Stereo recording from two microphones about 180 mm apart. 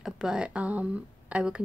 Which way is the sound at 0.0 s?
5° right (ahead or behind).